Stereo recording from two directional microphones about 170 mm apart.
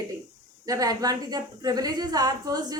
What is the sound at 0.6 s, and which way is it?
A woman's voice, 20° right (ahead or behind).